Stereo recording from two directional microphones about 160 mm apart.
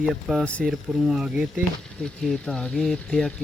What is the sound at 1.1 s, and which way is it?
Speech, 5° right (ahead or behind).